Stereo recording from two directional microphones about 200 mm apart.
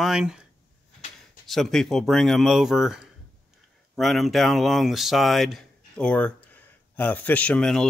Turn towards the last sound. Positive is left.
turn(degrees=0)  # may be behind; listen again after turning